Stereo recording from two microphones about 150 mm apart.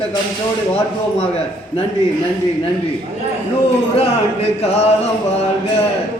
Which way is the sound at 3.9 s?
40° left (ahead or behind).